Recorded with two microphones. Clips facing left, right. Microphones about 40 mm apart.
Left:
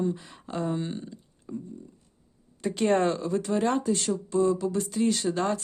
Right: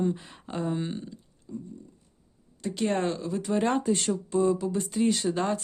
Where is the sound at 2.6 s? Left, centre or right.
Centre.